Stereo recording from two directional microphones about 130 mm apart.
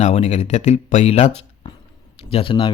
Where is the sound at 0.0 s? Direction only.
55° left (ahead or behind).